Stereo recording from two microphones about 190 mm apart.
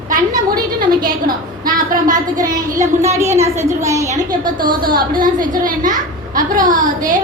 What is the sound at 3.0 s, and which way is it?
A child's voice, 15° right (ahead or behind).